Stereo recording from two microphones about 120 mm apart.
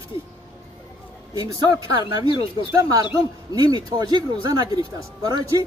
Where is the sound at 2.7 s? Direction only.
25° right (ahead or behind).